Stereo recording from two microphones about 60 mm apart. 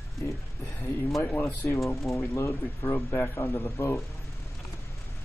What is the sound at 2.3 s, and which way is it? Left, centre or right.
Speech, left.